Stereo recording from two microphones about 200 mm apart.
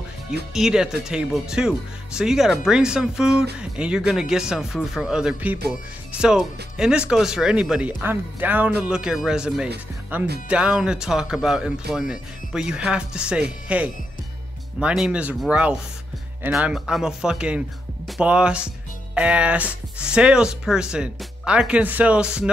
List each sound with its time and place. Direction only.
0.5 s speech: centre (ahead or behind)